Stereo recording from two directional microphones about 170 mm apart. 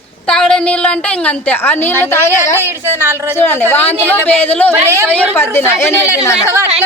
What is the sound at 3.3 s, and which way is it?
Speech, 15° left (ahead or behind).